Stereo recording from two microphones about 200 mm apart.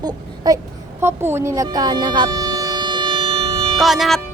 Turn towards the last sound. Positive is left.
turn(degrees=0)  # may be behind; listen again after turning